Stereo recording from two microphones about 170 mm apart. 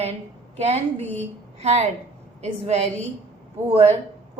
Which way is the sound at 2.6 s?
40° right (ahead or behind).